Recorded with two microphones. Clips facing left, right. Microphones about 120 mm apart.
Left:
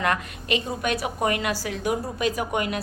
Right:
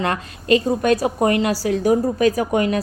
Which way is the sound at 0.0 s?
35° right (ahead or behind).